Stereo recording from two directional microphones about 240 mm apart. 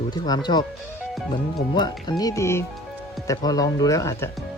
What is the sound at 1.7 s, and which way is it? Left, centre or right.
Speech, centre.